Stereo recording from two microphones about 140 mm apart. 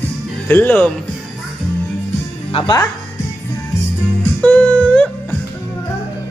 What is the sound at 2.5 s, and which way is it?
Speech, 40° left (ahead or behind).